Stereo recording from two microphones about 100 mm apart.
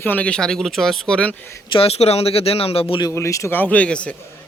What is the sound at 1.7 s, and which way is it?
Speech, 80° left.